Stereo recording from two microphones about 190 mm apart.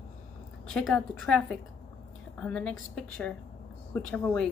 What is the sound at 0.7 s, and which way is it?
Speech, 5° left (ahead or behind).